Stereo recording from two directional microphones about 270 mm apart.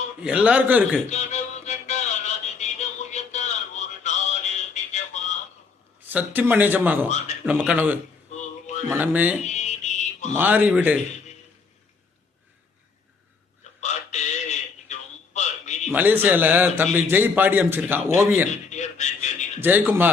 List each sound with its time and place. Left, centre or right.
0.2 s a man's voice: centre
1.1 s music: left
6.1 s a man's voice: centre
8.3 s music: left
8.9 s a man's voice: centre
9.5 s mantra: left
10.3 s a man's voice: centre
13.8 s radio: left
15.9 s a man's voice: centre
18.7 s a sound: left
19.6 s a man's voice: centre